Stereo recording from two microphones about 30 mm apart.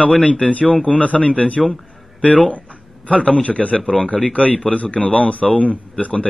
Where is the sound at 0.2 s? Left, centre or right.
Left.